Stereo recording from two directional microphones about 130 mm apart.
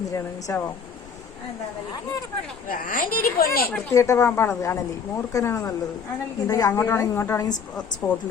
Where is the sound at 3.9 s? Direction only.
25° left (ahead or behind).